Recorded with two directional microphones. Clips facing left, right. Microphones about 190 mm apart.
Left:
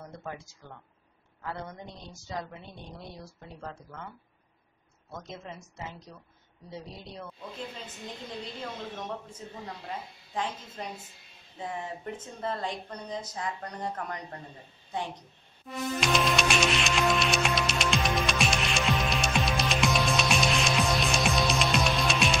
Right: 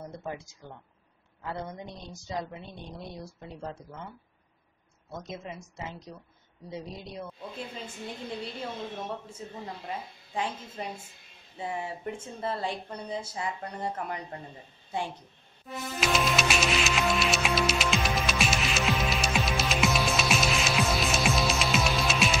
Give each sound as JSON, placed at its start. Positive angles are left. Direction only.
{"t": 1.7, "sound": "speech", "side_deg": -15}
{"t": 5.4, "sound": "speech", "side_deg": -15}
{"t": 8.9, "sound": "a woman's voice", "side_deg": -5}
{"t": 16.0, "sound": "music", "side_deg": 0}